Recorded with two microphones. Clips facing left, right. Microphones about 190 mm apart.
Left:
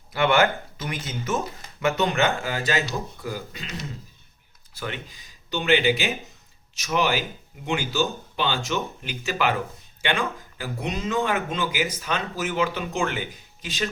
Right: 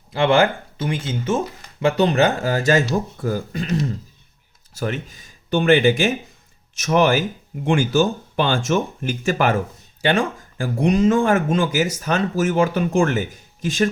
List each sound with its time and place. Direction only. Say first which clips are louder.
0.1 s speech: right 4 dB; 30° right (ahead or behind); by 13.9 s 45° right (ahead or behind)